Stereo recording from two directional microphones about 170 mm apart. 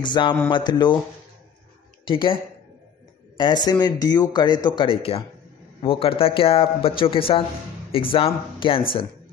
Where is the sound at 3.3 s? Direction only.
25° left (ahead or behind).